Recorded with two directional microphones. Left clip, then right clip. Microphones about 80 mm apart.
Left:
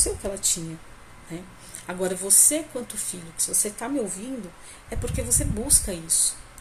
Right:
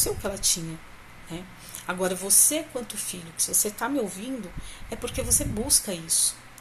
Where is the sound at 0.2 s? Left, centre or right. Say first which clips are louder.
Right 1 dB; left.